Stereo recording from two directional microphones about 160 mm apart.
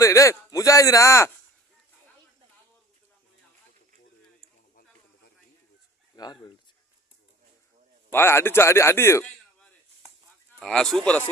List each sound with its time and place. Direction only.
0.0 s a man's voice: 20° left (ahead or behind)
6.1 s chicken: 25° left (ahead or behind)
8.1 s a man's voice: 15° left (ahead or behind)